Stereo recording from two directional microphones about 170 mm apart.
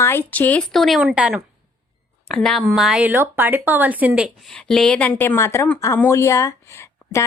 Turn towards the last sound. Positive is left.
turn(degrees=15)  # may be behind; listen again after turning